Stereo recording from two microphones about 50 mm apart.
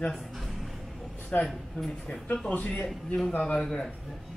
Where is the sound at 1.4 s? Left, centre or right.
Centre.